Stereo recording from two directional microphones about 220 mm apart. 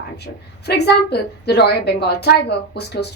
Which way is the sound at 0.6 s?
50° left (ahead or behind).